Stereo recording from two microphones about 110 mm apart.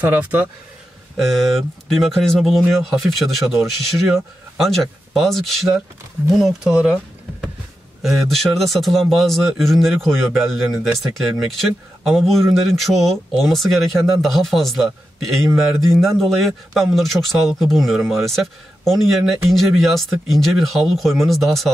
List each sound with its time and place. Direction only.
0.0 s speech: 15° right (ahead or behind)
1.1 s a man's voice: centre (ahead or behind)
8.0 s a man's voice: centre (ahead or behind)